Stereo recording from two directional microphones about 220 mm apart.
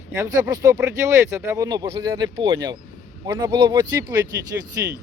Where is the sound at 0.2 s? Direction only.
15° right (ahead or behind).